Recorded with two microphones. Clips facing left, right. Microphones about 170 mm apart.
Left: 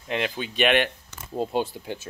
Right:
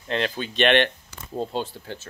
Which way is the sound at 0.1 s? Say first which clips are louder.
Right 1 dB; 10° left (ahead or behind).